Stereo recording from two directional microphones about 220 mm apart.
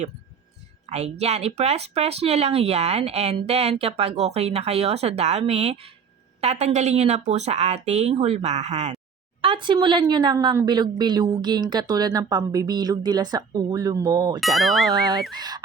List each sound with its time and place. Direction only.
0.9 s a woman's voice: 30° right (ahead or behind)
14.4 s speech: centre (ahead or behind)
15.3 s speech: 20° right (ahead or behind)